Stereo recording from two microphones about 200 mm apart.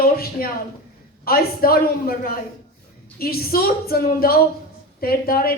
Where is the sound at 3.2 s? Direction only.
50° left (ahead or behind).